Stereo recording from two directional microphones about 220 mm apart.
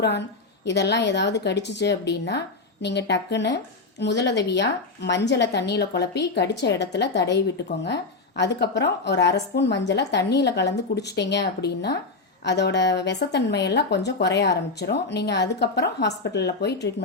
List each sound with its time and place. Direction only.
0.0 s speech: 50° left (ahead or behind)